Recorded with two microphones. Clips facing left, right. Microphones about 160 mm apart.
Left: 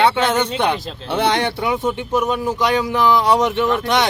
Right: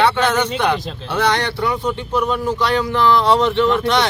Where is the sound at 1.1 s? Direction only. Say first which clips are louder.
Left 1 dB; 25° left (ahead or behind).